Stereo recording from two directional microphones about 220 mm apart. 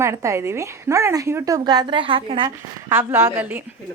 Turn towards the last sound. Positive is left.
turn(degrees=-10)  # may be behind; listen again after turning